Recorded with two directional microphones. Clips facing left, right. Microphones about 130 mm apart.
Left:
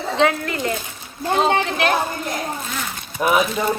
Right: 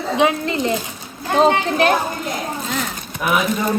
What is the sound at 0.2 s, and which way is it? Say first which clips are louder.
Speech: right 1 dB; 20° right (ahead or behind).